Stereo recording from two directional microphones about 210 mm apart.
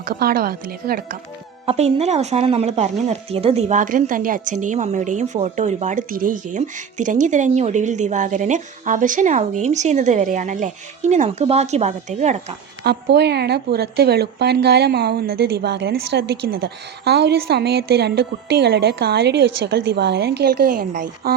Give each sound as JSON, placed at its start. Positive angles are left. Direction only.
{"t": 0.1, "sound": "a woman's voice", "side_deg": -45}
{"t": 1.6, "sound": "a woman's voice", "side_deg": -30}
{"t": 12.8, "sound": "a woman's voice", "side_deg": -50}